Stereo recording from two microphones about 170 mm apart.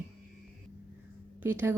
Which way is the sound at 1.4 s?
15° right (ahead or behind).